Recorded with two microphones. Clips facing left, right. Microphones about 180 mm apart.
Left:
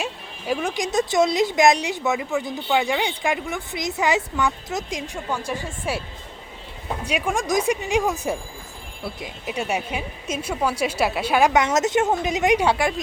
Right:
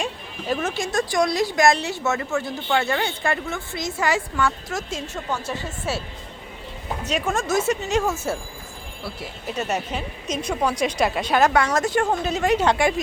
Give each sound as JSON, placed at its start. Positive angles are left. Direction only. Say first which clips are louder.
{"t": 0.0, "sound": "a woman's voice", "louder": "right 1 dB", "side_deg": 10}
{"t": 7.0, "sound": "a woman's voice", "louder": "even", "side_deg": 10}